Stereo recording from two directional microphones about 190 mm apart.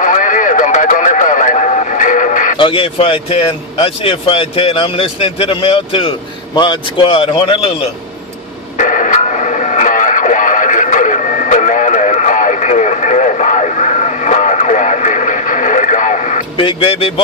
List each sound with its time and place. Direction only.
0.0 s radio: 45° left (ahead or behind)
2.5 s speech: 25° left (ahead or behind)
8.7 s radio: 40° left (ahead or behind)
16.5 s speech: 30° left (ahead or behind)